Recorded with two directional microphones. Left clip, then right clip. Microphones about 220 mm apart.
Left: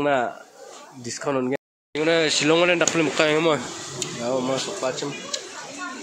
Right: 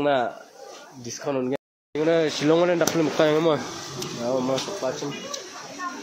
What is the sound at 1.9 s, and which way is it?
Speech, 10° right (ahead or behind).